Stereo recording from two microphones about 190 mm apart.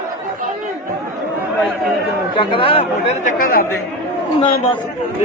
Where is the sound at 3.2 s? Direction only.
50° left (ahead or behind).